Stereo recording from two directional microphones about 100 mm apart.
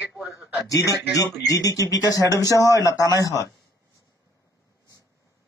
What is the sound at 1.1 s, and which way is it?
Speech, 35° left (ahead or behind).